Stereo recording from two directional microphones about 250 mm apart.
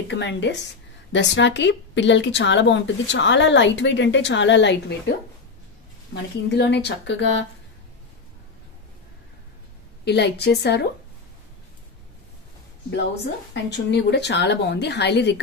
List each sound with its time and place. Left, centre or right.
0.1 s a woman's voice: left
6.5 s a woman's voice: left
10.0 s a woman's voice: left
13.5 s a woman's voice: left